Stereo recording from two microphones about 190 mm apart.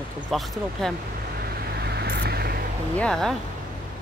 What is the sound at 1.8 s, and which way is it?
Vehicle, 60° right (ahead or behind).